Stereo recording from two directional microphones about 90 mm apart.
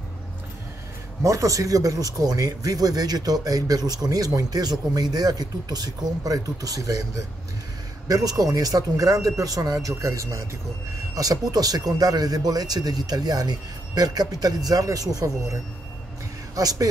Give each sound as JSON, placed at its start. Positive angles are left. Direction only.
{"t": 1.2, "sound": "speech", "side_deg": -35}